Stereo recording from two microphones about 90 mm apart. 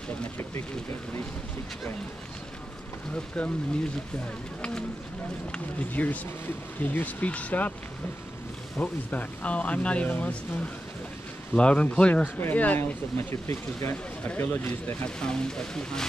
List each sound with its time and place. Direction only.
3.4 s speech: 10° left (ahead or behind)
4.6 s speech: 10° left (ahead or behind)
8.7 s speech: 15° left (ahead or behind)
13.5 s speech: 35° left (ahead or behind)
14.3 s speech: 20° left (ahead or behind)
15.0 s speech: 10° left (ahead or behind)